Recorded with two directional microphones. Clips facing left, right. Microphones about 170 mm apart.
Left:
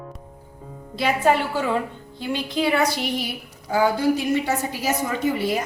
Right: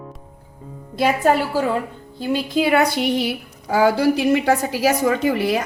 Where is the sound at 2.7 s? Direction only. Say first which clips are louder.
Right 5 dB; 60° right (ahead or behind).